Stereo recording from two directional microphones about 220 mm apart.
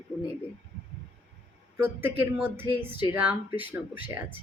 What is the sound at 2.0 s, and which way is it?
Speech, 10° right (ahead or behind).